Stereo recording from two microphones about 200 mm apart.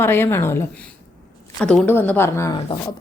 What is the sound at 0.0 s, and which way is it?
Speech, 10° left (ahead or behind).